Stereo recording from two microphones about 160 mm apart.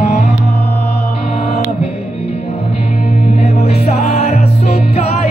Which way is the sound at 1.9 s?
45° left (ahead or behind).